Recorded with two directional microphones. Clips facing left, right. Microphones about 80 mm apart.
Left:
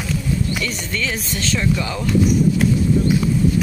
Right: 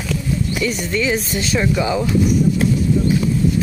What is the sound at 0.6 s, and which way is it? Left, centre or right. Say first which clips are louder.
Speech: right 5 dB; centre.